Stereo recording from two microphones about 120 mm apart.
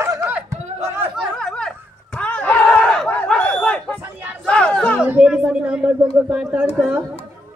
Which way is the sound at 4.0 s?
15° right (ahead or behind).